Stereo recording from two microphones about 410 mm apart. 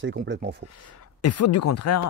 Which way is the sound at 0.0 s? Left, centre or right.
Right.